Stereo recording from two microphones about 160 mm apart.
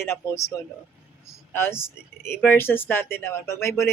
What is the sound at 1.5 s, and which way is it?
Speech, 15° left (ahead or behind).